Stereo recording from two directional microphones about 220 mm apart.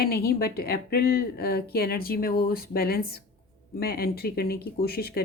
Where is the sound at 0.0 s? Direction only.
45° left (ahead or behind).